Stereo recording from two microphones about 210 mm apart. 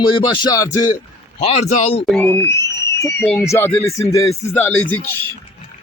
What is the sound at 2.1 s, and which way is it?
Speech, 10° left (ahead or behind).